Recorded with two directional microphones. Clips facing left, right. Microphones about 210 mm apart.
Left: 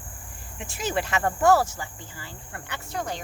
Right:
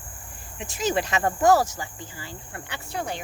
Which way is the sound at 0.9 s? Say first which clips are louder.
Right 2 dB; 20° right (ahead or behind).